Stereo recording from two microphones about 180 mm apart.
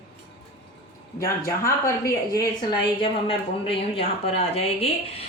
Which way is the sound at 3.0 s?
30° left (ahead or behind).